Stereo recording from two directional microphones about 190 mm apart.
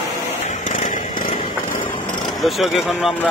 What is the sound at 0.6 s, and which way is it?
Chainsaw, 40° left (ahead or behind).